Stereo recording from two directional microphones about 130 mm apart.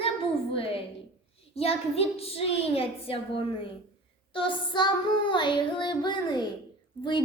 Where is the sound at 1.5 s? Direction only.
50° left (ahead or behind).